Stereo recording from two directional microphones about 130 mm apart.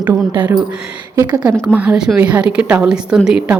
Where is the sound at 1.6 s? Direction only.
10° right (ahead or behind).